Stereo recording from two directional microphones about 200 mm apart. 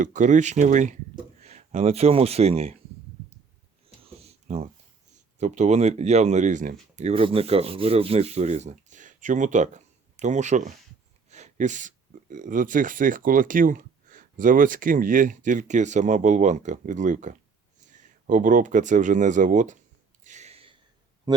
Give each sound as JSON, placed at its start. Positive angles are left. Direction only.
{"t": 0.0, "sound": "speech", "side_deg": -40}
{"t": 4.4, "sound": "speech", "side_deg": -35}
{"t": 20.2, "sound": "a sound", "side_deg": -35}